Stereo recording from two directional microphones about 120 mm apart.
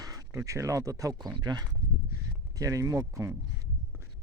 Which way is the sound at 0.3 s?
25° right (ahead or behind).